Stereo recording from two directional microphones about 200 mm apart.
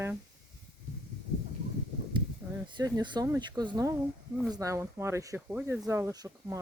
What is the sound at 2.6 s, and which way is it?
Speech, 20° right (ahead or behind).